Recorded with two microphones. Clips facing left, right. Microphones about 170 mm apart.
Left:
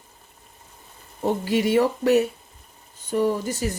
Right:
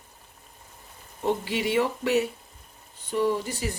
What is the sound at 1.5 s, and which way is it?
A woman's voice, 45° left (ahead or behind).